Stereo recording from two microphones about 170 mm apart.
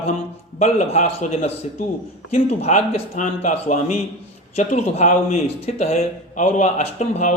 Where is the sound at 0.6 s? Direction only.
40° left (ahead or behind).